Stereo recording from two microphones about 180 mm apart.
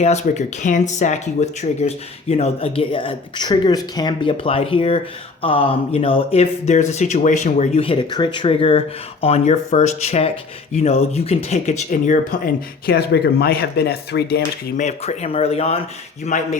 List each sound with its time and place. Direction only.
0.0 s speech: 40° left (ahead or behind)
12.8 s speech: 60° left (ahead or behind)
14.8 s speech: 40° left (ahead or behind)